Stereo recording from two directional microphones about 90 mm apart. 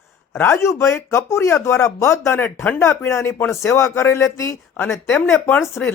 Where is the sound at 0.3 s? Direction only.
30° left (ahead or behind).